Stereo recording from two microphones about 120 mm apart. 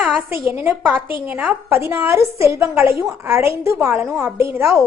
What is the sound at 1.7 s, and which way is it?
A woman's voice, 20° right (ahead or behind).